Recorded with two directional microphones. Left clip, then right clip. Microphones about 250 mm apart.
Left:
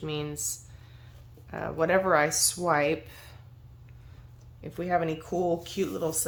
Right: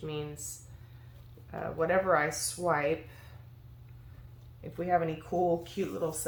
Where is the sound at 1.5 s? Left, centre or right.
Left.